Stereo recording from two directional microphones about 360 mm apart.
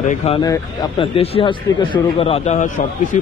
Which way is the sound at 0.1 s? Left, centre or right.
Centre.